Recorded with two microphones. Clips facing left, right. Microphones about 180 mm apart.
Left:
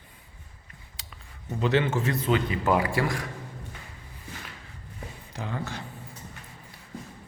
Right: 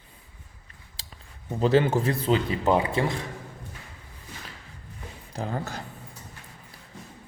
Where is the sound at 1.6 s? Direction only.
35° right (ahead or behind).